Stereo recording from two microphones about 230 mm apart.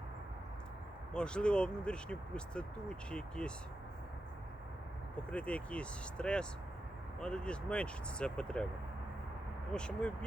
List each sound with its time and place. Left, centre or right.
1.1 s speech: centre
5.3 s speech: centre
9.7 s speech: centre